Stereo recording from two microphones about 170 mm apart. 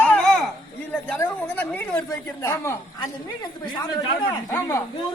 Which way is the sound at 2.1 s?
15° left (ahead or behind).